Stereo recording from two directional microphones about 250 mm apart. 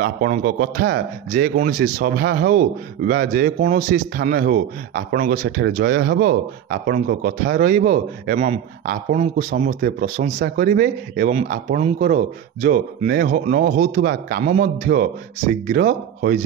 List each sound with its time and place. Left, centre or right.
0.0 s a man's voice: right